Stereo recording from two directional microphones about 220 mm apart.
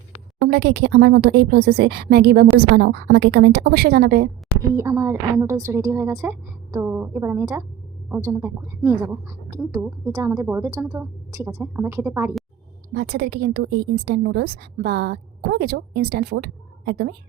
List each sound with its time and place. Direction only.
0.4 s a woman's voice: 50° right (ahead or behind)
4.7 s speech: 10° right (ahead or behind)
12.9 s a woman's voice: 45° right (ahead or behind)